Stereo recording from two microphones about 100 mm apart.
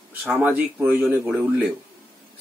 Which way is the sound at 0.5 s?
15° right (ahead or behind).